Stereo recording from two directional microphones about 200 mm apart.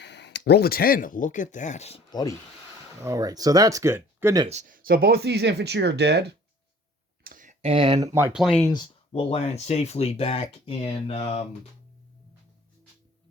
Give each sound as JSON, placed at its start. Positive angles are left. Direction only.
{"t": 0.0, "sound": "speech", "side_deg": 60}
{"t": 2.0, "sound": "speech", "side_deg": 20}
{"t": 3.0, "sound": "speech", "side_deg": -15}
{"t": 4.4, "sound": "speech", "side_deg": -40}
{"t": 7.3, "sound": "speech", "side_deg": -40}
{"t": 8.4, "sound": "speech", "side_deg": 0}
{"t": 8.6, "sound": "speech", "side_deg": 20}